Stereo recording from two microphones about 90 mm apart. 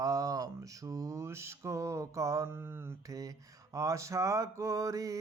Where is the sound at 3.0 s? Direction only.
40° right (ahead or behind).